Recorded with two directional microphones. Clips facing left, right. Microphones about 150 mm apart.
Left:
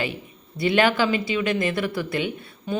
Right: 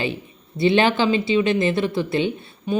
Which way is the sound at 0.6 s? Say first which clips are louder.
Right 3 dB; 25° right (ahead or behind).